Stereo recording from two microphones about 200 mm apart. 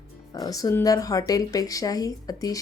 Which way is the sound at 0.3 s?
20° left (ahead or behind).